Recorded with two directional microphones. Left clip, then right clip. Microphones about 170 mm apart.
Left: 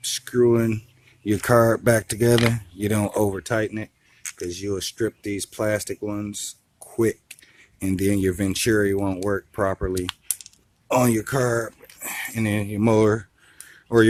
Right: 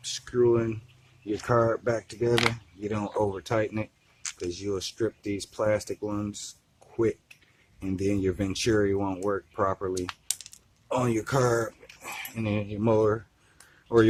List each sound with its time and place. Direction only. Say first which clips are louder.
0.0 s a sound: left 5 dB; 40° left (ahead or behind)
1.2 s speech: left 7 dB; 50° left (ahead or behind); by 9.9 s 35° left (ahead or behind)
10.8 s speech: left 8 dB; 55° left (ahead or behind)
11.1 s speech: left 3 dB; 25° left (ahead or behind)
12.0 s speech: left 6 dB; 40° left (ahead or behind)